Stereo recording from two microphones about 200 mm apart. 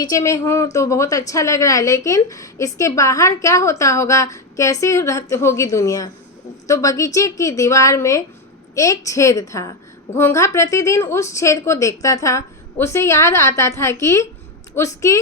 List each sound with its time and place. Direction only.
0.0 s a woman's voice: 15° left (ahead or behind)